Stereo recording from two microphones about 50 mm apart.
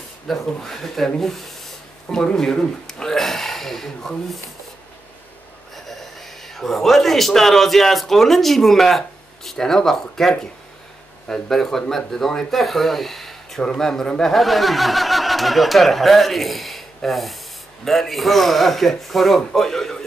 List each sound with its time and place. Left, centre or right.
0.3 s speech: centre
5.9 s speech: centre